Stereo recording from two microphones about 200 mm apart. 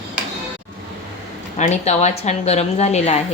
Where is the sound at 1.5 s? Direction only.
35° left (ahead or behind).